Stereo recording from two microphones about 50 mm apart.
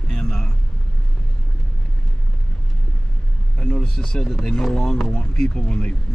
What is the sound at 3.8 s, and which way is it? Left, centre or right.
Speech, centre.